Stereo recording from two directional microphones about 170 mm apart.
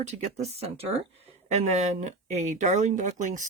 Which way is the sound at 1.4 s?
40° right (ahead or behind).